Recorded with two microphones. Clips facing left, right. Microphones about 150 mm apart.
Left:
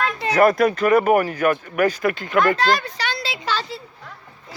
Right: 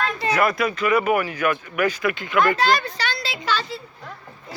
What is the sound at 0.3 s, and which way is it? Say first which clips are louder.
Speech: left 7 dB; 45° left (ahead or behind).